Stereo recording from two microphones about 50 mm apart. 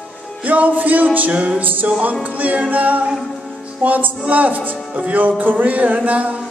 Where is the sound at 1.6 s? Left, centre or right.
Right.